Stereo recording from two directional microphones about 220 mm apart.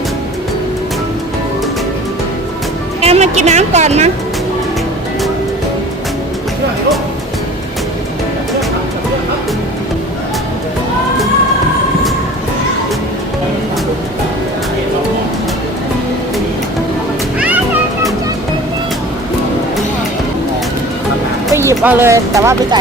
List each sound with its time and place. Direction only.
3.0 s a woman's voice: 30° right (ahead or behind)
21.5 s speech: 10° right (ahead or behind)